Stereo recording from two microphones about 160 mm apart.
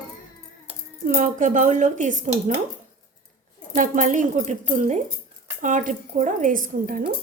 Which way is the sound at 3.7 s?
55° right (ahead or behind).